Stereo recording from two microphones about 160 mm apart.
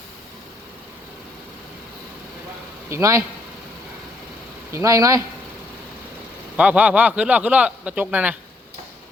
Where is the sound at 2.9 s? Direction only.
20° right (ahead or behind).